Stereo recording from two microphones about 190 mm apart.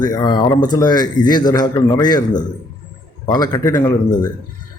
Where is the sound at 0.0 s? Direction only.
20° left (ahead or behind).